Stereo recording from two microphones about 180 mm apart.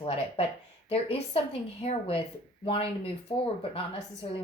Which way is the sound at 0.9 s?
35° left (ahead or behind).